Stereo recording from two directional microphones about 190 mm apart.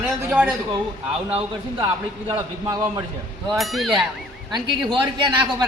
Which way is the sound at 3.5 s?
Centre (ahead or behind).